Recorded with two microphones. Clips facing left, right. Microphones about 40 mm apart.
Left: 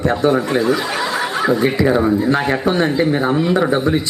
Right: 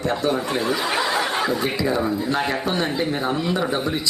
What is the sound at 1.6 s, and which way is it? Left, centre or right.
Speech, left.